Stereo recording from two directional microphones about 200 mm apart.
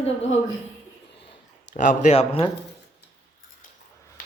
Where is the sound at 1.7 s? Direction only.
35° left (ahead or behind).